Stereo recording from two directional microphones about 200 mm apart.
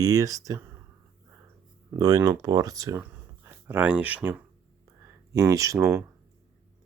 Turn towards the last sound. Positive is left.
turn(degrees=-15)  # may be behind; listen again after turning